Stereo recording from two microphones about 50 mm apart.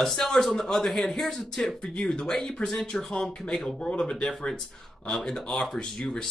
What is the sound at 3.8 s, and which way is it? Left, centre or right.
A man's voice, centre.